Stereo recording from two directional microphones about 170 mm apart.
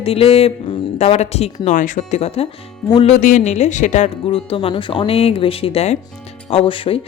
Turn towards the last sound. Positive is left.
turn(degrees=35)  # may be behind; listen again after turning